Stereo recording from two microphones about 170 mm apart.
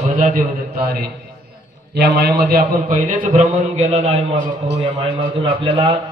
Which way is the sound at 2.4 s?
55° right (ahead or behind).